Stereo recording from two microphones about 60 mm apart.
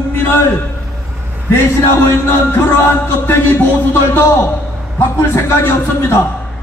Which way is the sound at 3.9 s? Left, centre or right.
Left.